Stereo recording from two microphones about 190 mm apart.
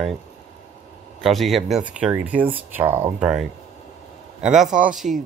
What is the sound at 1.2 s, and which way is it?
Speech, centre (ahead or behind).